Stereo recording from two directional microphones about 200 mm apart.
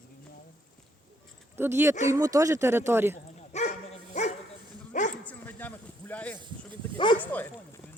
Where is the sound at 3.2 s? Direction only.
35° left (ahead or behind).